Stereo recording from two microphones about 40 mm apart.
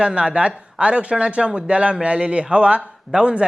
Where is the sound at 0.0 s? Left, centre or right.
Right.